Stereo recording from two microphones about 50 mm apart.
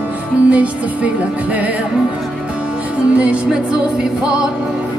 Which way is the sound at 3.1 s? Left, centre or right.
Right.